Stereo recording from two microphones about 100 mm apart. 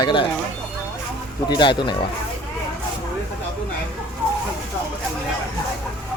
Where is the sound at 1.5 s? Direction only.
50° left (ahead or behind).